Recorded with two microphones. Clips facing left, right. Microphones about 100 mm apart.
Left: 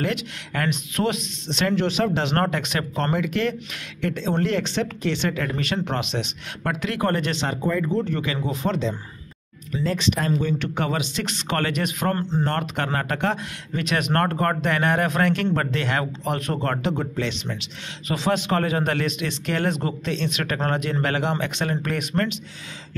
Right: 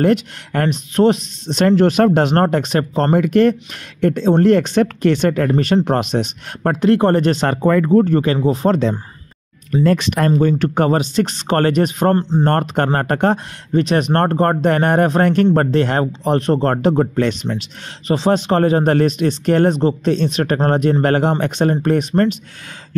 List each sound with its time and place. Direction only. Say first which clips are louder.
0.0 s speech: right 11 dB; 45° right (ahead or behind)
1.8 s speech: right 10 dB; 50° right (ahead or behind)
2.3 s speech: right 8 dB; 40° right (ahead or behind)
7.6 s speech: right 11 dB; 70° right (ahead or behind)
8.0 s speech: right 11 dB; 40° right (ahead or behind)
8.7 s speech: right 8 dB; 50° right (ahead or behind)
10.3 s speech: right 9 dB; 40° right (ahead or behind)
12.2 s speech: right 7 dB; 20° right (ahead or behind)
12.4 s speech: right 9 dB; 45° right (ahead or behind)
16.7 s speech: right 10 dB; 45° right (ahead or behind)
17.6 s speech: right 6 dB; 35° right (ahead or behind)